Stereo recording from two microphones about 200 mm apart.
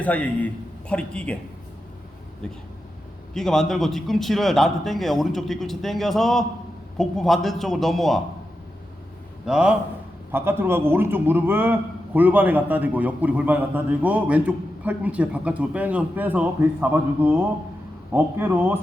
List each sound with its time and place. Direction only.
0.0 s a man's voice: 5° left (ahead or behind)
3.3 s a man's voice: centre (ahead or behind)
9.5 s a man's voice: 5° right (ahead or behind)